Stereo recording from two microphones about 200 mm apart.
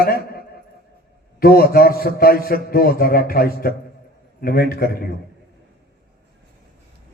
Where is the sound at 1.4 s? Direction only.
50° left (ahead or behind).